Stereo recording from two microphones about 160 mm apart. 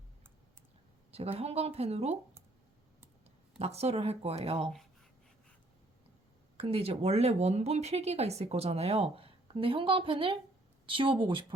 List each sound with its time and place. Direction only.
1.1 s speech: 40° right (ahead or behind)
3.6 s speech: 40° right (ahead or behind)
6.6 s speech: 40° right (ahead or behind)